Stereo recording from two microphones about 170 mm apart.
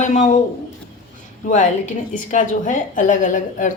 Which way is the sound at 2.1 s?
50° left (ahead or behind).